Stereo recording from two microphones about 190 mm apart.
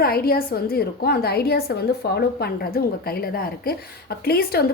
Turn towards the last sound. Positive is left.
turn(degrees=55)  # may be behind; listen again after turning